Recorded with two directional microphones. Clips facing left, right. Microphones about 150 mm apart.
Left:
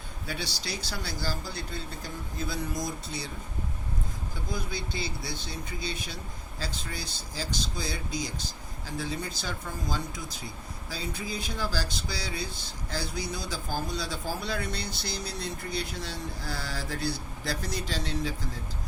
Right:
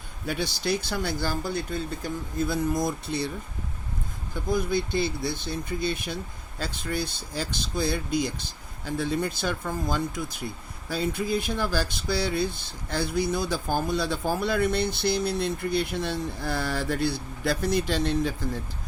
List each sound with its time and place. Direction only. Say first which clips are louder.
0.3 s speech: right 9 dB; 50° right (ahead or behind)
4.5 s speech: right 10 dB; 55° right (ahead or behind)